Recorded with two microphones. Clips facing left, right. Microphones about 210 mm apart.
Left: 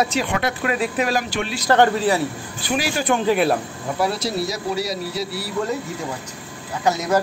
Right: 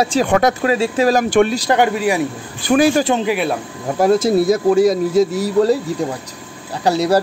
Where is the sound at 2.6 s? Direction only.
50° right (ahead or behind).